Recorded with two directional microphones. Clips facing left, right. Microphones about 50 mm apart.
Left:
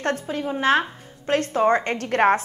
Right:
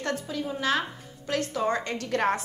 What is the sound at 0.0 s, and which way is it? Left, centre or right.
A woman's voice, left.